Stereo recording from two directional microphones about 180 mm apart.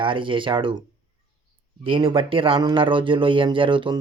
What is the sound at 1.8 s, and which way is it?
Speech, 30° right (ahead or behind).